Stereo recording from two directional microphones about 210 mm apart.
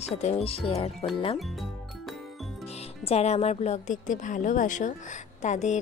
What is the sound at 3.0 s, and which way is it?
Speech, 30° left (ahead or behind).